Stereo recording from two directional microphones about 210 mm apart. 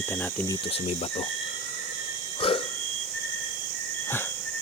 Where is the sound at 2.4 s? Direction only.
25° left (ahead or behind).